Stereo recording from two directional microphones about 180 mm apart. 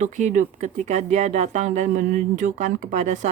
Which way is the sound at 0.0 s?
45° right (ahead or behind).